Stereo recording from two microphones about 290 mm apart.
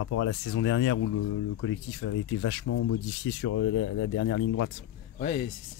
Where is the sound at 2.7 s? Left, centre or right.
Left.